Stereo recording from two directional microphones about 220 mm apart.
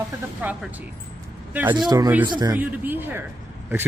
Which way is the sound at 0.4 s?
10° right (ahead or behind).